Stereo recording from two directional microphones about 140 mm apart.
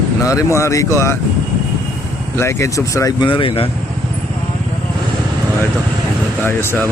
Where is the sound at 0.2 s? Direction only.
25° left (ahead or behind).